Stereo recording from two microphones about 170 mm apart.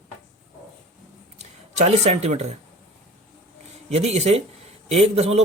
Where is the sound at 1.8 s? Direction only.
40° right (ahead or behind).